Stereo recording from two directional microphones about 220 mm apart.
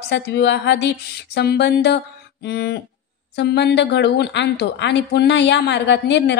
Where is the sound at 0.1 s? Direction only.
50° left (ahead or behind).